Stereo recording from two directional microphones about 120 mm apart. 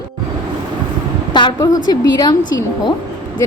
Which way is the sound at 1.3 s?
35° left (ahead or behind).